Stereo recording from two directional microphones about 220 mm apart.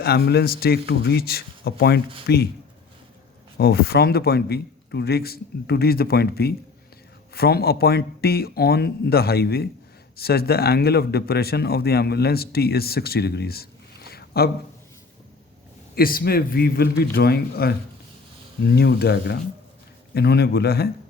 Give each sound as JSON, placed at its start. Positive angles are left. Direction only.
{"t": 0.0, "sound": "speech", "side_deg": 45}
{"t": 3.6, "sound": "speech", "side_deg": 45}
{"t": 16.0, "sound": "speech", "side_deg": 40}